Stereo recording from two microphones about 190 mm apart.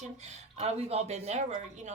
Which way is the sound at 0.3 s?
35° right (ahead or behind).